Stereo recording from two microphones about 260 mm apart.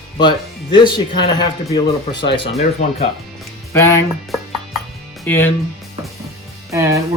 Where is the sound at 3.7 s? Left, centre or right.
Centre.